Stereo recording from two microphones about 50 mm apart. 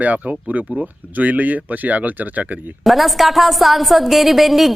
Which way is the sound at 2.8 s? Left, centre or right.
Centre.